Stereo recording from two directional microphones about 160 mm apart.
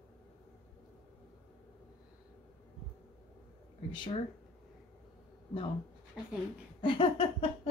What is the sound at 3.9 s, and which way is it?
Speech, 30° left (ahead or behind).